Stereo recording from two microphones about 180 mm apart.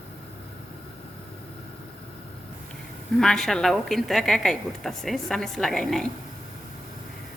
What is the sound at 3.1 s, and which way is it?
A woman's voice, centre (ahead or behind).